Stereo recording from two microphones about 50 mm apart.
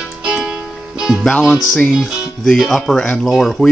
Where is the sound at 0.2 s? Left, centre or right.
Centre.